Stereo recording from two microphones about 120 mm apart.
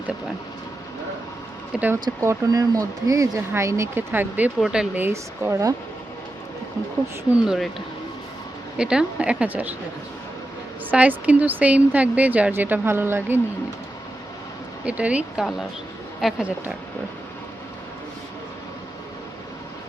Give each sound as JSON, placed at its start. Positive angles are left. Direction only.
{"t": 1.7, "sound": "speech", "side_deg": -15}
{"t": 2.0, "sound": "speech", "side_deg": -25}
{"t": 5.0, "sound": "speech", "side_deg": -20}
{"t": 7.4, "sound": "speech", "side_deg": -5}
{"t": 8.8, "sound": "speech", "side_deg": -5}
{"t": 10.9, "sound": "speech", "side_deg": -10}
{"t": 14.8, "sound": "speech", "side_deg": -10}